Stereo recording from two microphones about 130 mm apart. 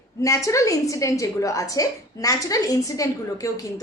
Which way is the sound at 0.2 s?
25° left (ahead or behind).